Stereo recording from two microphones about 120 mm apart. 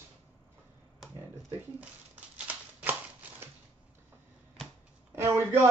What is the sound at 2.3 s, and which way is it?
Shuffling cards, 10° right (ahead or behind).